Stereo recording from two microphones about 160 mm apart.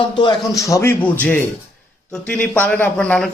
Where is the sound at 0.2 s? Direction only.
25° left (ahead or behind).